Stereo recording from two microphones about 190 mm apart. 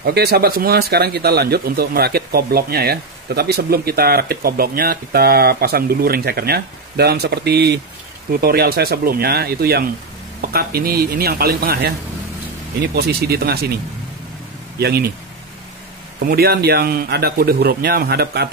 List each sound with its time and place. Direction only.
0.0 s speech: 60° right (ahead or behind)
14.8 s speech: 55° right (ahead or behind)
16.2 s speech: 55° right (ahead or behind)